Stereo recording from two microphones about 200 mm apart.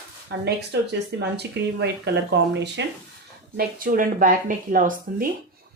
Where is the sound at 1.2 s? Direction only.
55° right (ahead or behind).